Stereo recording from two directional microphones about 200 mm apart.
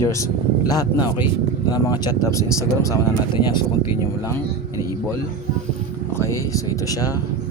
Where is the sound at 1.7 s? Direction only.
15° left (ahead or behind).